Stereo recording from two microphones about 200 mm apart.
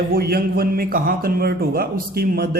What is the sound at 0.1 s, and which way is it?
A man's voice, 50° right (ahead or behind).